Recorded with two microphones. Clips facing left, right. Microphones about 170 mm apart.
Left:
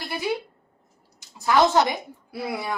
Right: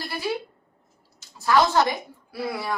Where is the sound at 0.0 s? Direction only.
20° left (ahead or behind).